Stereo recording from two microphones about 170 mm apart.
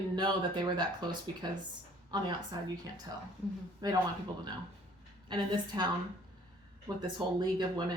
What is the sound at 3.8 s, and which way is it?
Speech, 25° right (ahead or behind).